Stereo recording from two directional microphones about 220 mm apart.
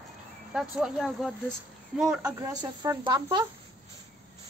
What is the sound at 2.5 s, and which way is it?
Speech, 20° right (ahead or behind).